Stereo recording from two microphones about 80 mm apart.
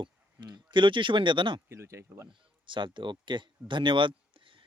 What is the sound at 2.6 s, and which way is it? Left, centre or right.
Speech, right.